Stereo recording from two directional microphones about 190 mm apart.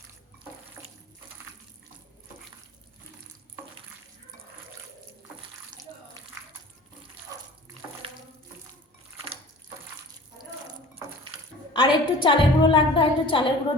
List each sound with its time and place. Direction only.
0.8 s water: 15° right (ahead or behind)
11.7 s a woman's voice: 25° left (ahead or behind)